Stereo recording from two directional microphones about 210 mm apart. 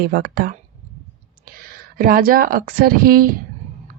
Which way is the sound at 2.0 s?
45° right (ahead or behind).